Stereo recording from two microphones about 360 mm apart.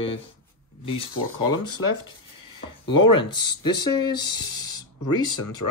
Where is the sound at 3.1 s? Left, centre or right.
Centre.